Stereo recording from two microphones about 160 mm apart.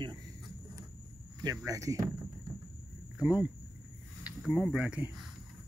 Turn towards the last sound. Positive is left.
turn(degrees=-5)  # may be behind; listen again after turning